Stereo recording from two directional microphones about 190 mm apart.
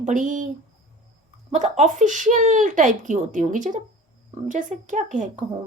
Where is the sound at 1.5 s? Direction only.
40° right (ahead or behind).